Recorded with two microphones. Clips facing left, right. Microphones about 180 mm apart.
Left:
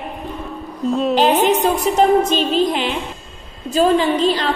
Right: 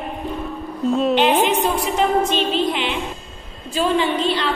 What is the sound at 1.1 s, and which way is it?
A woman's voice, 40° left (ahead or behind).